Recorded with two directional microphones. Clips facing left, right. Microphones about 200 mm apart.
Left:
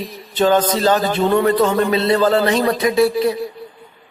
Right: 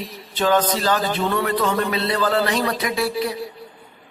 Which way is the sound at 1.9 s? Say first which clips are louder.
Left 6 dB; 25° left (ahead or behind).